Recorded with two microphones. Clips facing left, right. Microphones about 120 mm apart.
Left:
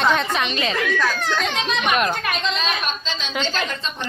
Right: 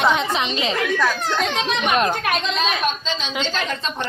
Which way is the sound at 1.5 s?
30° right (ahead or behind).